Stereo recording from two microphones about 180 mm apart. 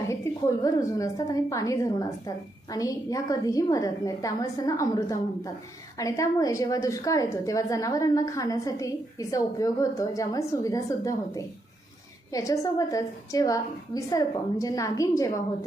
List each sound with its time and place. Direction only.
0.1 s a woman's voice: 15° left (ahead or behind)